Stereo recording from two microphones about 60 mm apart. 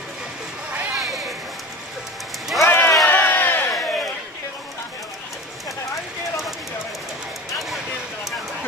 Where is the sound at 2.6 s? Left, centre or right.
Left.